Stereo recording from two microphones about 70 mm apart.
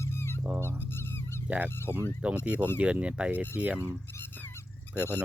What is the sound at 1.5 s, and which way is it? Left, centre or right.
Speech, right.